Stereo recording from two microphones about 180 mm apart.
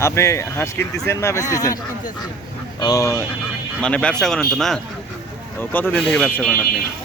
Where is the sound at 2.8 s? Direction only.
20° left (ahead or behind).